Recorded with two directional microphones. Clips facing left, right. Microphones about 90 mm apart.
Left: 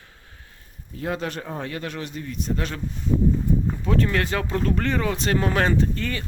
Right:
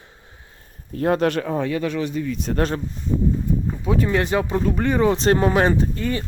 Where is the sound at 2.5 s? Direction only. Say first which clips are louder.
Right 5 dB; 60° right (ahead or behind).